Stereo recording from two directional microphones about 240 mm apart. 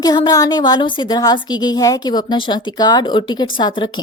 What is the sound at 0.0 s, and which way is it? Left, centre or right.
Speech, centre.